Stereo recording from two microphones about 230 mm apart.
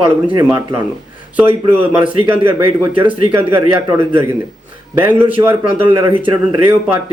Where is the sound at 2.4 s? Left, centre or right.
Right.